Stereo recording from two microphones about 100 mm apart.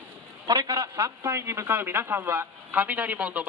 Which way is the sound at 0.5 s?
35° right (ahead or behind).